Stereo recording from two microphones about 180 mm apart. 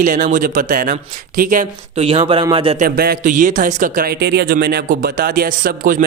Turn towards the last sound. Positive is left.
turn(degrees=-50)  # may be behind; listen again after turning